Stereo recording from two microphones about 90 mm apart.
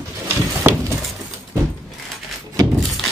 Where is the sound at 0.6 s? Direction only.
30° right (ahead or behind).